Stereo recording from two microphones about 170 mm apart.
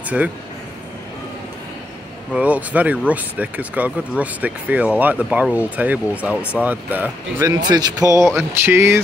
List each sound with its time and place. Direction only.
0.2 s speech: 5° right (ahead or behind)
2.3 s speech: 10° right (ahead or behind)